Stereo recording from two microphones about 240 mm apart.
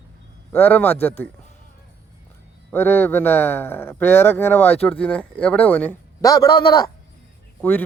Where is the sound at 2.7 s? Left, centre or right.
Centre.